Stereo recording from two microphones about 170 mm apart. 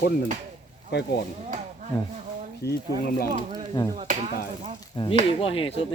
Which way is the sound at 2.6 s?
75° left (ahead or behind).